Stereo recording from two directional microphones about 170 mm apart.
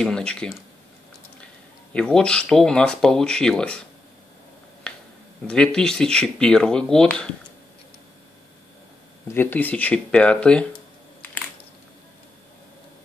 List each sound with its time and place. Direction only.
0.0 s speech: 5° left (ahead or behind)
2.0 s speech: 5° left (ahead or behind)
4.9 s finger snapping: 5° left (ahead or behind)
5.5 s speech: 5° left (ahead or behind)
9.3 s speech: 10° left (ahead or behind)